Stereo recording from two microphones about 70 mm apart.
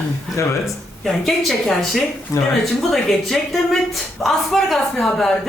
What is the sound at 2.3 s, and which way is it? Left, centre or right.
Speech, left.